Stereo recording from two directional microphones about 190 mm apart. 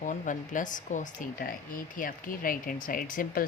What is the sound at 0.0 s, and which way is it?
Speech, 40° left (ahead or behind).